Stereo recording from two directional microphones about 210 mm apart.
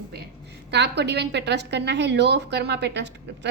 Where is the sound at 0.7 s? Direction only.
55° right (ahead or behind).